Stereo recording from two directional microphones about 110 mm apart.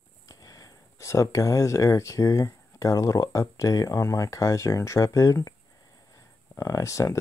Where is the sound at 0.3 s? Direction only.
30° left (ahead or behind).